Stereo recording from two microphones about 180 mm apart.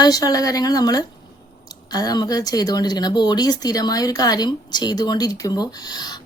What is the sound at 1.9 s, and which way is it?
Speech, 20° left (ahead or behind).